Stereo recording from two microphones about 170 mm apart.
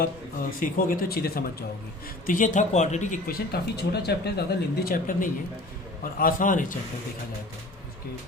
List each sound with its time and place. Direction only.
0.6 s speech: 60° left (ahead or behind)
2.2 s speech: 50° left (ahead or behind)
3.2 s speech: 65° left (ahead or behind)